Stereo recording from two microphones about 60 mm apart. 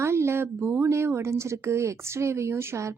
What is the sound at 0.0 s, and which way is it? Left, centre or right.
Speech, right.